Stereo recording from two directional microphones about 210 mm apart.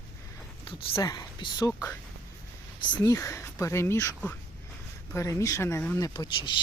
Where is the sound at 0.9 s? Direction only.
15° left (ahead or behind).